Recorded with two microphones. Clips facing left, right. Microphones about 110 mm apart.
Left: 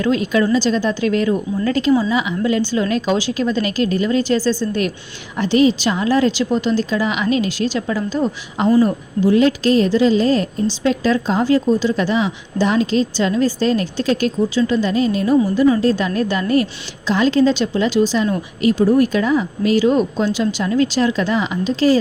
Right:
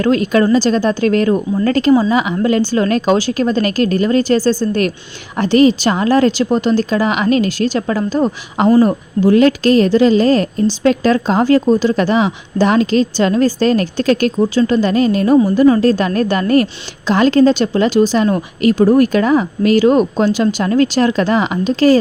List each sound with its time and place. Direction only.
0.0 s a woman's voice: 50° right (ahead or behind)